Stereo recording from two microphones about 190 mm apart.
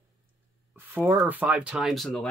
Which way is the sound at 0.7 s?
10° right (ahead or behind).